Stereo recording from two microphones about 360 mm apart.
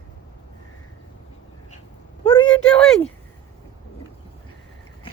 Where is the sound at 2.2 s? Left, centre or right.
Centre.